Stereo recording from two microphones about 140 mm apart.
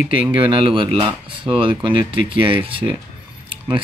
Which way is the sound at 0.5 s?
35° right (ahead or behind).